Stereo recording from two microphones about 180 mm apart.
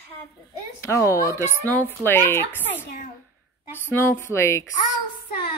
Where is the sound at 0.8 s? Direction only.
15° left (ahead or behind).